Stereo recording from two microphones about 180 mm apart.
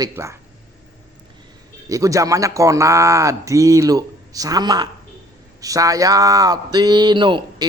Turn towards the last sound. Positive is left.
turn(degrees=-25)  # may be behind; listen again after turning